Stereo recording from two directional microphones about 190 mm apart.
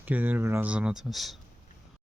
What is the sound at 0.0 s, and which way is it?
Speech, 10° right (ahead or behind).